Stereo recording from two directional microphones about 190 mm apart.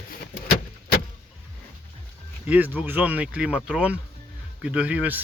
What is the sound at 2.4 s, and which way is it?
Speech, 10° right (ahead or behind).